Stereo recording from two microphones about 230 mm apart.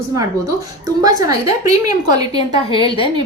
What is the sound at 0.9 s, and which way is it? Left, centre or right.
A woman's voice, centre.